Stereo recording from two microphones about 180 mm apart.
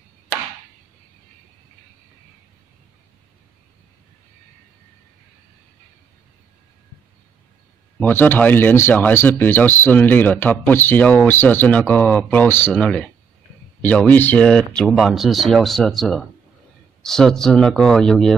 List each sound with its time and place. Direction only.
8.0 s speech: 10° left (ahead or behind)